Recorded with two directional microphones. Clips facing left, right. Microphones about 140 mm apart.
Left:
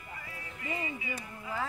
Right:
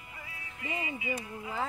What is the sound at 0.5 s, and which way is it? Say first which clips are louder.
Music: even; 20° right (ahead or behind).